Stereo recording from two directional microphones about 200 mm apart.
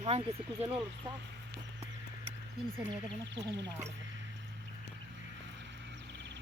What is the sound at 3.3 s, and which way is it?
Speech, 20° right (ahead or behind).